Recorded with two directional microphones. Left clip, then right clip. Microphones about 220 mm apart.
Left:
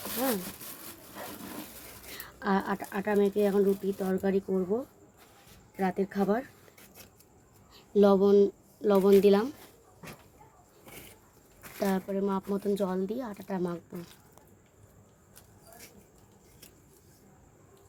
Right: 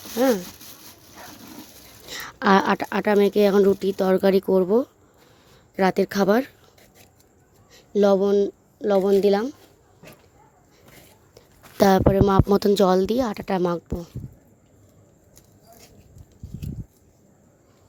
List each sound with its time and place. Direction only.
2.1 s a woman's voice: 40° right (ahead or behind)
7.9 s speech: 30° right (ahead or behind)
11.8 s a woman's voice: 55° right (ahead or behind)